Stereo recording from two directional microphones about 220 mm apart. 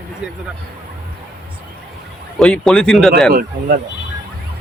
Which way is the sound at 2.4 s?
5° left (ahead or behind).